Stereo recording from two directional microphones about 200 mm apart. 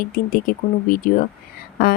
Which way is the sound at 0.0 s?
45° left (ahead or behind).